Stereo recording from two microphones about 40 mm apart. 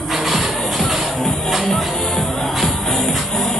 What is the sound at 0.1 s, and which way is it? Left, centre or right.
Music, centre.